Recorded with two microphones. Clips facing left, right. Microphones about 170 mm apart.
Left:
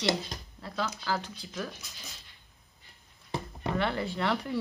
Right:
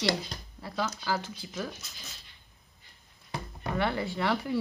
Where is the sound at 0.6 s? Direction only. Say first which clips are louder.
Right 1 dB; 10° right (ahead or behind).